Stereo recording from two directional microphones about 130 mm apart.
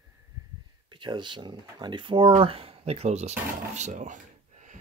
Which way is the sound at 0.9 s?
35° right (ahead or behind).